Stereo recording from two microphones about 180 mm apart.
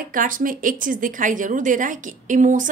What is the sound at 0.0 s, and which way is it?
A woman's voice, 50° right (ahead or behind).